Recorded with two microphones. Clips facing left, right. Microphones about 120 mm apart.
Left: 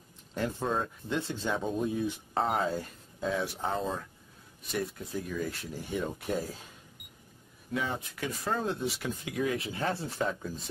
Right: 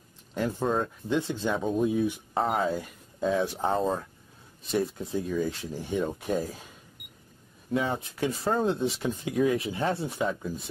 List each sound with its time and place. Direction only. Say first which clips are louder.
0.3 s speech: right 4 dB; 15° right (ahead or behind)
1.6 s speech: right 7 dB; 5° right (ahead or behind)
3.6 s speech: right 6 dB; 30° right (ahead or behind)
5.9 s speech: right 4 dB; 15° right (ahead or behind)
7.7 s speech: right 5 dB; 30° right (ahead or behind)